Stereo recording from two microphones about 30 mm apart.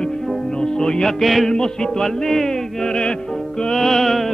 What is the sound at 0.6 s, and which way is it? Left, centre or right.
Music, left.